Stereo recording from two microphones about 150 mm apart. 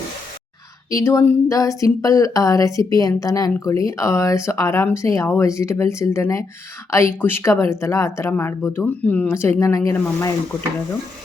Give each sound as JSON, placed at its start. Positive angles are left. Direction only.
{"t": 0.9, "sound": "speech", "side_deg": 20}